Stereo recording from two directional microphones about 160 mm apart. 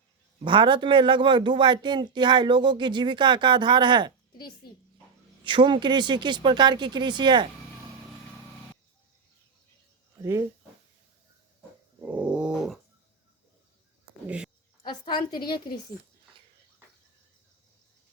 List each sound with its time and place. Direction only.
0.4 s speech: 30° right (ahead or behind)
4.6 s speech: 75° left (ahead or behind)
5.4 s speech: 30° right (ahead or behind)
10.2 s speech: 20° right (ahead or behind)
12.0 s dog: 5° right (ahead or behind)
14.3 s speech: 5° right (ahead or behind)
14.8 s a woman's voice: 25° left (ahead or behind)